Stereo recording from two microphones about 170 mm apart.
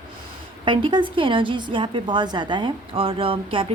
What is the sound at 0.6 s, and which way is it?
A woman's voice, 25° right (ahead or behind).